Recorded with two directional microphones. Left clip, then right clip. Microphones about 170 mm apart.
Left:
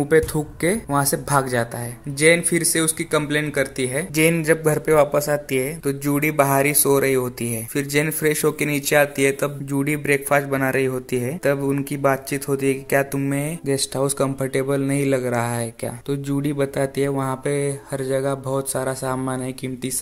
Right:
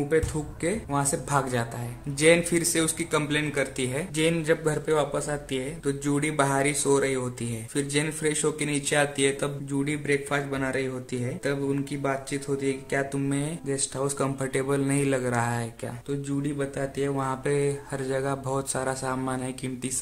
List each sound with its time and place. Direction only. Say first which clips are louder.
0.1 s speech: left 10 dB; 45° left (ahead or behind)
13.2 s speech: left 5 dB; 25° left (ahead or behind)
16.1 s speech: left 6 dB; 50° left (ahead or behind)
17.1 s speech: left 4 dB; 25° left (ahead or behind)